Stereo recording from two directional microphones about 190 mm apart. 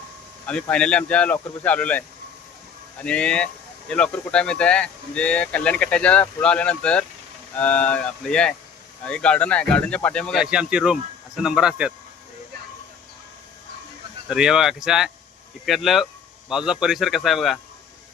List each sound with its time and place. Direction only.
0.4 s speech: 5° left (ahead or behind)
14.3 s speech: 5° right (ahead or behind)